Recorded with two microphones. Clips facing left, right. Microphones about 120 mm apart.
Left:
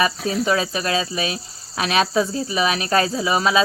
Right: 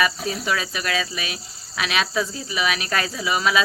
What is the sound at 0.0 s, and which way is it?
Speech, 30° left (ahead or behind).